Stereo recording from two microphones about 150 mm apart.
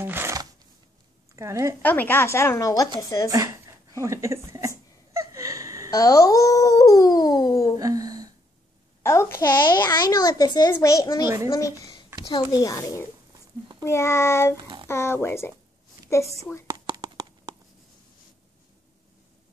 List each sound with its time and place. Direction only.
0.0 s a sound: 15° right (ahead or behind)
1.3 s a woman's voice: 20° right (ahead or behind)
1.8 s a woman's voice: 10° left (ahead or behind)
3.3 s speech: 20° right (ahead or behind)
4.0 s a sound: 20° right (ahead or behind)
5.9 s speech: 25° left (ahead or behind)
7.8 s a sound: 25° right (ahead or behind)
9.0 s a child's voice: 15° left (ahead or behind)
9.4 s a child's voice: 30° left (ahead or behind)
16.7 s clip-clop: 25° right (ahead or behind)